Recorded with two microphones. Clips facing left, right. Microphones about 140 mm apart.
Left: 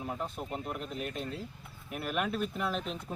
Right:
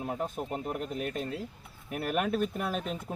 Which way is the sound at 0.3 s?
5° right (ahead or behind).